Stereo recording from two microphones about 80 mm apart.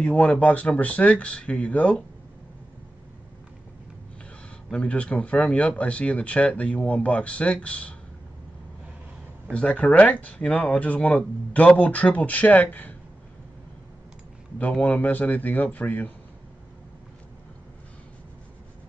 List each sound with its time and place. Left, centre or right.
0.0 s speech: centre
4.6 s speech: centre
9.5 s speech: centre
14.6 s a man's voice: centre